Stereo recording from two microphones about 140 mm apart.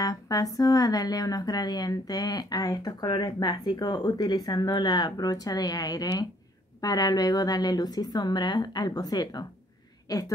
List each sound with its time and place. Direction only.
0.0 s a woman's voice: 25° left (ahead or behind)